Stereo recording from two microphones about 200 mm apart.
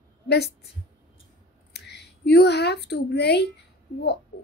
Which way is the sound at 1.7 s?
55° left (ahead or behind).